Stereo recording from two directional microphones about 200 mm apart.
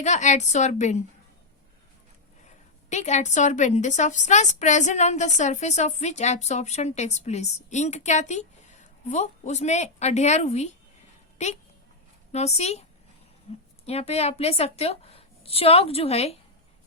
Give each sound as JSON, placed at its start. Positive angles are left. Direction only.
{"t": 0.0, "sound": "a woman's voice", "side_deg": 35}
{"t": 2.9, "sound": "a woman's voice", "side_deg": 35}
{"t": 12.3, "sound": "a woman's voice", "side_deg": 35}